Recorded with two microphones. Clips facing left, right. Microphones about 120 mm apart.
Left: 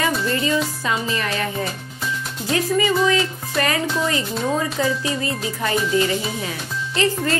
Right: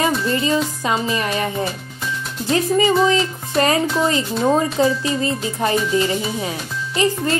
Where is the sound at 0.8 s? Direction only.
20° right (ahead or behind).